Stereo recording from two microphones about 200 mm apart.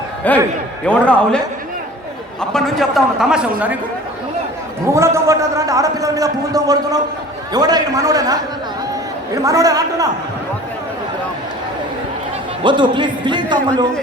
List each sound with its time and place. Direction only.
0.3 s a man's voice: 10° left (ahead or behind)
2.5 s a man's voice: centre (ahead or behind)
4.9 s a man's voice: 15° right (ahead or behind)
12.6 s speech: 25° right (ahead or behind)